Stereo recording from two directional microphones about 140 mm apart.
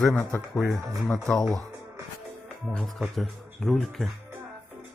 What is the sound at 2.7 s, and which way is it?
Speech, 5° left (ahead or behind).